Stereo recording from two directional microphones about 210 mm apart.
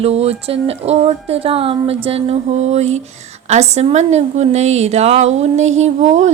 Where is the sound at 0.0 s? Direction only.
30° right (ahead or behind).